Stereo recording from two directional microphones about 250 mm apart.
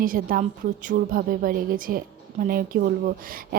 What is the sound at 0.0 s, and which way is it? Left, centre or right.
A woman's voice, right.